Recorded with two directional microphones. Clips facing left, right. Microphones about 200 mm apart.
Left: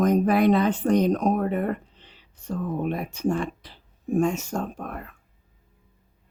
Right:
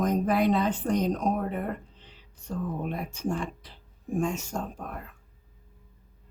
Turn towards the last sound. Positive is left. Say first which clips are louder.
# left 4 dB
turn(degrees=65)  # may be behind; listen again after turning